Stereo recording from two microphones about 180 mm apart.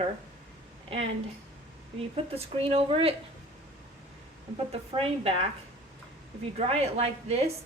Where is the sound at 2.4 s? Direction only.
35° right (ahead or behind).